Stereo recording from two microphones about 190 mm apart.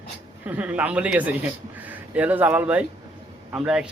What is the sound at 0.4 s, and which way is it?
A man's voice, 10° right (ahead or behind).